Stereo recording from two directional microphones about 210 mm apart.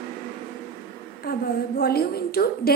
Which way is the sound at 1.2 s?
45° left (ahead or behind).